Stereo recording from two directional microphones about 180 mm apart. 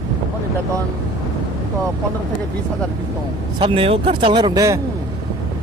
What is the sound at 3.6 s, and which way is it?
Speech, 30° right (ahead or behind).